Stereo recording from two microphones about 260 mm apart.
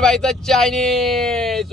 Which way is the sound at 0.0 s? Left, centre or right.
Centre.